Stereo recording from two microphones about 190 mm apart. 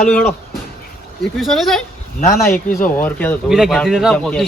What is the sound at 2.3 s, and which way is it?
Speech, 50° left (ahead or behind).